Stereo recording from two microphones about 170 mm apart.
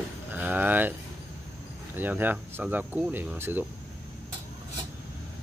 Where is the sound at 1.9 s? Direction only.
10° right (ahead or behind).